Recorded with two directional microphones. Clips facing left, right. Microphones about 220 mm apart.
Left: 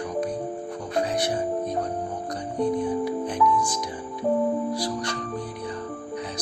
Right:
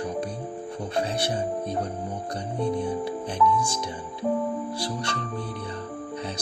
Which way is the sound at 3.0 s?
30° right (ahead or behind).